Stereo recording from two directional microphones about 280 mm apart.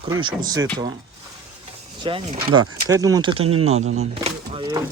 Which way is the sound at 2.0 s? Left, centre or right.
Centre.